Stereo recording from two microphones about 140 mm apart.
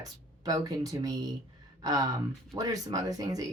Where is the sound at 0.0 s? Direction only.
25° right (ahead or behind).